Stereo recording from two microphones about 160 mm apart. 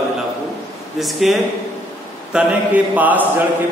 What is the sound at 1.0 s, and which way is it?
A man's voice, centre (ahead or behind).